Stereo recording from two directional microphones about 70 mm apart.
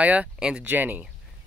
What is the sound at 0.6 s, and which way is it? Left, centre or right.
Speech, right.